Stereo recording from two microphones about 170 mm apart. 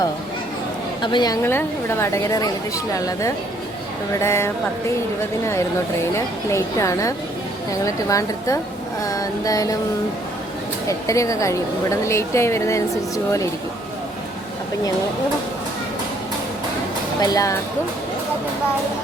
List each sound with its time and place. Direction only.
1.0 s a woman's voice: 25° left (ahead or behind)
1.4 s a woman's voice: 15° left (ahead or behind)
6.1 s a woman's voice: 15° left (ahead or behind)
10.8 s a woman's voice: 20° left (ahead or behind)
17.2 s a woman's voice: 20° left (ahead or behind)